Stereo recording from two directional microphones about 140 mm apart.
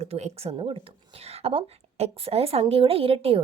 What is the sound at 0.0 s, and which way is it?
Speech, 50° right (ahead or behind).